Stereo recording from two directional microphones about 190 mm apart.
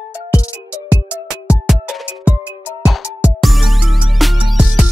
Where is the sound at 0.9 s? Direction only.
5° right (ahead or behind).